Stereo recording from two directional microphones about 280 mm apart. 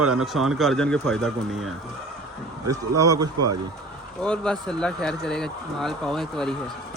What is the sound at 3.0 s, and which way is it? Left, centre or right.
Speech, centre.